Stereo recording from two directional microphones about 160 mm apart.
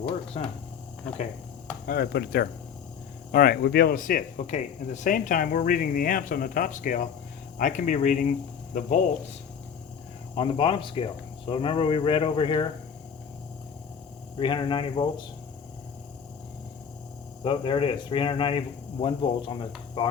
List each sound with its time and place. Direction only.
0.4 s speech: 40° left (ahead or behind)
1.9 s speech: 80° left
3.3 s speech: 70° left (ahead or behind); by 9.0 s 50° left (ahead or behind)
10.3 s speech: 35° left (ahead or behind)
14.3 s speech: 30° left (ahead or behind)
17.4 s speech: 35° left (ahead or behind)